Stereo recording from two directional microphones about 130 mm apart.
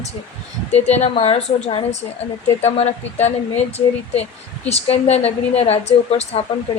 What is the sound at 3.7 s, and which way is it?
A woman's voice, 55° left (ahead or behind).